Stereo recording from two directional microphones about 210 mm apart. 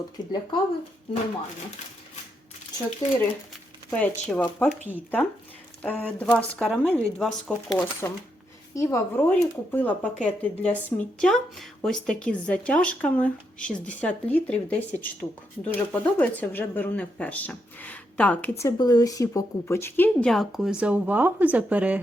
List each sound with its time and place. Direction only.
0.2 s speech: 20° left (ahead or behind)
3.0 s speech: 20° left (ahead or behind)
3.8 s speech: 5° left (ahead or behind)
18.6 s speech: 20° left (ahead or behind); by 21.9 s 5° right (ahead or behind)